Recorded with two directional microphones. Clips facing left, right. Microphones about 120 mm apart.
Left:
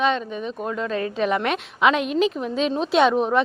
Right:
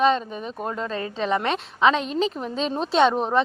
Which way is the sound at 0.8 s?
5° left (ahead or behind).